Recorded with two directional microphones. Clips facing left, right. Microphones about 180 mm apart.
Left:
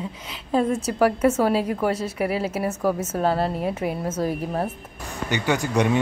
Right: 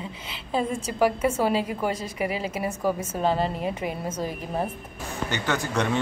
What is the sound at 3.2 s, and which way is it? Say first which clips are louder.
Speech: left 2 dB; 5° left (ahead or behind).